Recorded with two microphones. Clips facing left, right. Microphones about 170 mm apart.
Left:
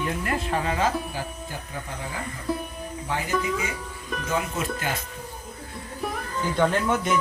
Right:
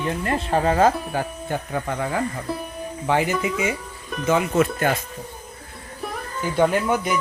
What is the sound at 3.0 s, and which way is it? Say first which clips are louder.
Speech: right 6 dB; 80° right.